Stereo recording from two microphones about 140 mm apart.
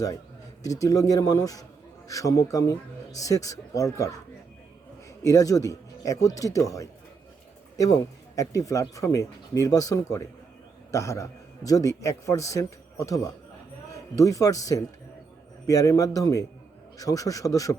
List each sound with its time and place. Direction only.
0.6 s speech: 25° left (ahead or behind)
5.2 s speech: 25° left (ahead or behind)